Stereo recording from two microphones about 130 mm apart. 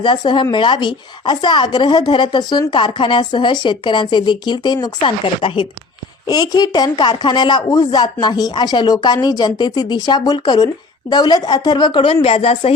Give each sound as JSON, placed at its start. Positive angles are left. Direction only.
{"t": 0.0, "sound": "speech", "side_deg": 35}
{"t": 6.2, "sound": "speech", "side_deg": 30}